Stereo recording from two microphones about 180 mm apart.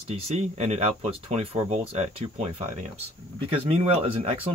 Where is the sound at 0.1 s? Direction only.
35° right (ahead or behind).